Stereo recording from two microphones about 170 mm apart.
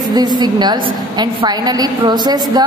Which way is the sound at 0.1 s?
25° right (ahead or behind).